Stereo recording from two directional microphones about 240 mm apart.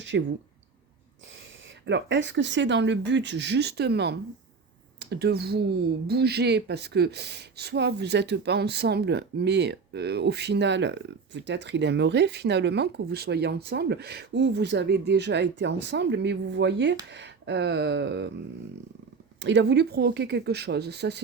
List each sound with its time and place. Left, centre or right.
0.1 s speech: right
1.9 s speech: right
19.4 s speech: right